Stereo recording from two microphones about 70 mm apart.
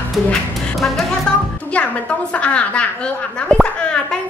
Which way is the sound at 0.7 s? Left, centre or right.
Centre.